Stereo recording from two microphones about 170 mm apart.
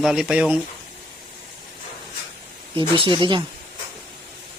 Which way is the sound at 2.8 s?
30° right (ahead or behind).